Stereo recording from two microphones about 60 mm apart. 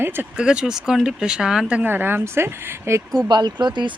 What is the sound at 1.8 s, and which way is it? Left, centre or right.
Speech, right.